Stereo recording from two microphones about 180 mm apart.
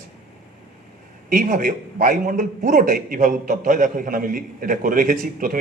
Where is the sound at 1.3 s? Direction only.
50° right (ahead or behind).